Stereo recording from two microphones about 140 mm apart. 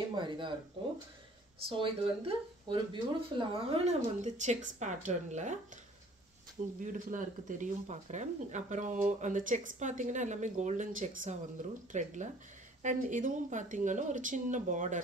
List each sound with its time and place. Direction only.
0.2 s speech: 35° right (ahead or behind)
1.7 s speech: 35° right (ahead or behind); by 5.6 s 60° right (ahead or behind)
6.8 s speech: 65° right (ahead or behind)